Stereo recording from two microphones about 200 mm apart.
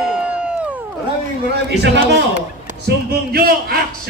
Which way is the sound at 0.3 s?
5° right (ahead or behind).